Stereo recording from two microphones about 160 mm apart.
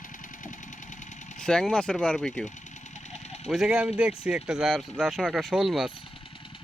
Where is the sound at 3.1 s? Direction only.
45° left (ahead or behind).